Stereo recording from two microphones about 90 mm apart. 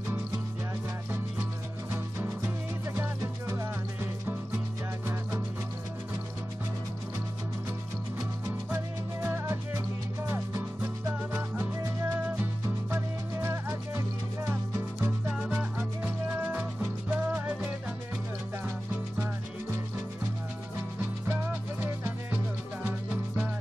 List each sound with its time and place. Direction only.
1.9 s music: 25° right (ahead or behind)
8.7 s music: 25° right (ahead or behind)
15.2 s music: 5° right (ahead or behind)
15.5 s music: 20° right (ahead or behind)
21.0 s music: 25° right (ahead or behind)